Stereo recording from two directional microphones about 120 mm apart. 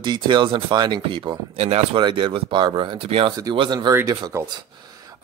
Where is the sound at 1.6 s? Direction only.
60° right (ahead or behind).